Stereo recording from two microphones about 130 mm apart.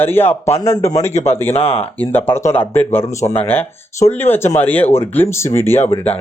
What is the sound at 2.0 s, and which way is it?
Speech, 15° left (ahead or behind).